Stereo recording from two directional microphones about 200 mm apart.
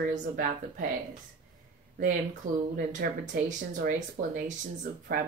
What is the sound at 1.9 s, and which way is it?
Speech, 40° right (ahead or behind).